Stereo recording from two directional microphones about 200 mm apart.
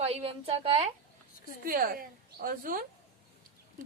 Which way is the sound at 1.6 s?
45° right (ahead or behind).